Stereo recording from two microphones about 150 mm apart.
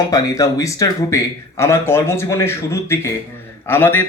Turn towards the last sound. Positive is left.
turn(degrees=15)  # may be behind; listen again after turning